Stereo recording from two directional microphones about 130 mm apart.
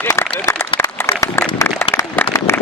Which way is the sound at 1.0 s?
20° left (ahead or behind).